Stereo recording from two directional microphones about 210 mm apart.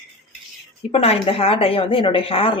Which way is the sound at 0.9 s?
25° left (ahead or behind).